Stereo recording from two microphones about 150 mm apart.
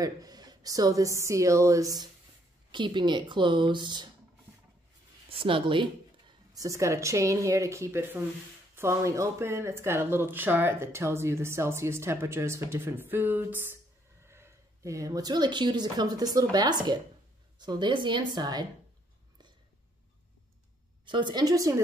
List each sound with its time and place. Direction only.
0.0 s a woman's voice: 25° right (ahead or behind)
5.3 s a woman's voice: 35° right (ahead or behind)
21.0 s a woman's voice: 30° right (ahead or behind)